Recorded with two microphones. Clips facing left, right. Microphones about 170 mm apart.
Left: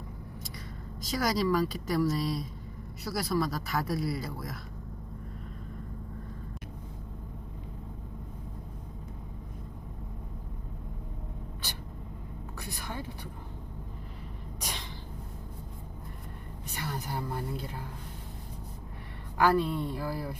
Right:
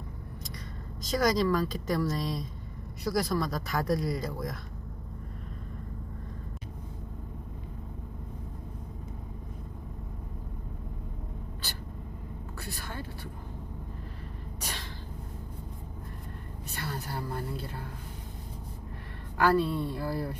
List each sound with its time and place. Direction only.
1.0 s speech: 5° left (ahead or behind)
12.5 s speech: 15° left (ahead or behind)
14.6 s a sound: 15° left (ahead or behind)
16.6 s speech: 15° left (ahead or behind)
19.4 s speech: 15° left (ahead or behind)